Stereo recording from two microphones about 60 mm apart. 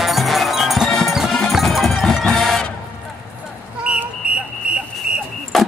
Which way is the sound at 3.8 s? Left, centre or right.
Right.